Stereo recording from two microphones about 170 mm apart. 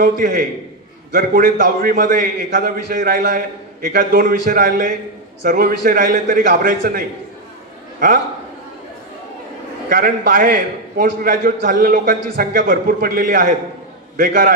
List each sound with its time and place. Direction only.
0.0 s a man's voice: 55° right (ahead or behind)
9.8 s a man's voice: 55° right (ahead or behind)